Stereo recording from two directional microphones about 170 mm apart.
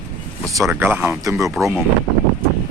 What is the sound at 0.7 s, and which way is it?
Speech, 10° right (ahead or behind).